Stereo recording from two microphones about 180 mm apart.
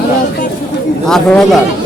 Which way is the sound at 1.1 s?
5° left (ahead or behind).